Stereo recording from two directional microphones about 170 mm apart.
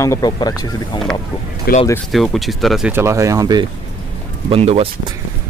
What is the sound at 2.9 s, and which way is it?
Speech, 15° right (ahead or behind).